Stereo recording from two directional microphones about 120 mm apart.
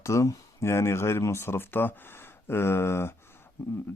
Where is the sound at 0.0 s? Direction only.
25° left (ahead or behind).